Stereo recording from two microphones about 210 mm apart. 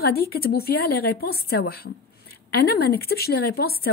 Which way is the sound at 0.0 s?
45° left (ahead or behind).